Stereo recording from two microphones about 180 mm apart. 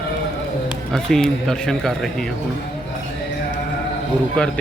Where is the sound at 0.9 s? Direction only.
5° left (ahead or behind).